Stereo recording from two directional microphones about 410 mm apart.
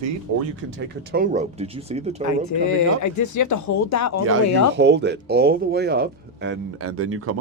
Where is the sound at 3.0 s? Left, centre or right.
Left.